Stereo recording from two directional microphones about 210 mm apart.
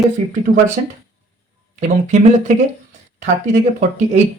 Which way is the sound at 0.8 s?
35° right (ahead or behind).